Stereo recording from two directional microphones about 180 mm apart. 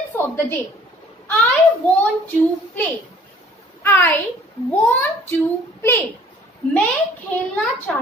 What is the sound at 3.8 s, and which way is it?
Speech, 15° left (ahead or behind).